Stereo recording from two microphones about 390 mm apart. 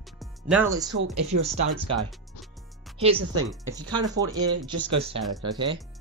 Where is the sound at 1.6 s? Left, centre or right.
Right.